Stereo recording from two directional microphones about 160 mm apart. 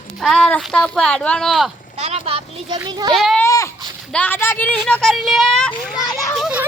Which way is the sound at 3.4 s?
20° left (ahead or behind).